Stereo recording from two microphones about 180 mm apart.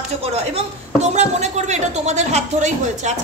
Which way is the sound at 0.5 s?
40° right (ahead or behind).